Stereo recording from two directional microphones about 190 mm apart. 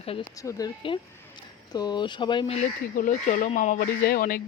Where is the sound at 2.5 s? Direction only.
40° left (ahead or behind).